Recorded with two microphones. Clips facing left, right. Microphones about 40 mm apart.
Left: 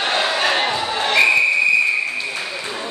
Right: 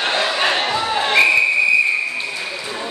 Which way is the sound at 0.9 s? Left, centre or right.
Centre.